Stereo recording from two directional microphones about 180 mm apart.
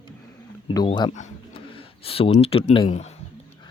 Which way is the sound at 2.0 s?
30° left (ahead or behind).